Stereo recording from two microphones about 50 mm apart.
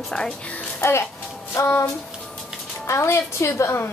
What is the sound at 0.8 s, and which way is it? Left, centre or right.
Speech, left.